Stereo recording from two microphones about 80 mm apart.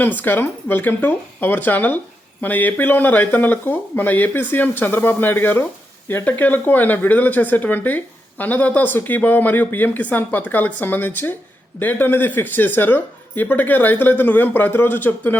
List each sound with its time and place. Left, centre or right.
0.0 s speech: left